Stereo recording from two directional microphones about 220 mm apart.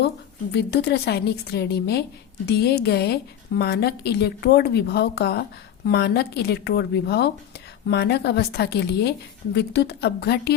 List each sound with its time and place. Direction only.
0.5 s speech: 50° left (ahead or behind)